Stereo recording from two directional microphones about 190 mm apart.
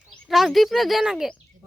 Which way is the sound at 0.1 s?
Centre (ahead or behind).